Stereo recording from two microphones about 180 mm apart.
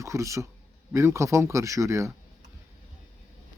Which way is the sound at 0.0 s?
15° right (ahead or behind).